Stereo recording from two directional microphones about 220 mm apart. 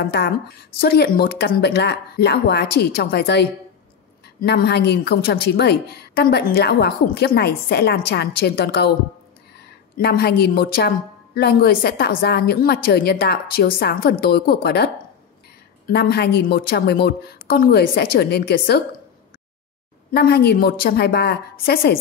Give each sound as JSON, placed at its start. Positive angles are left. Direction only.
{"t": 0.0, "sound": "a woman's voice", "side_deg": 50}
{"t": 9.9, "sound": "a woman's voice", "side_deg": 45}
{"t": 15.9, "sound": "a woman's voice", "side_deg": 45}
{"t": 20.1, "sound": "a woman's voice", "side_deg": 45}